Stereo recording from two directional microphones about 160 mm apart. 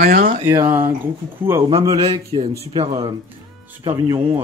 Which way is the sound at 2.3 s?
35° right (ahead or behind).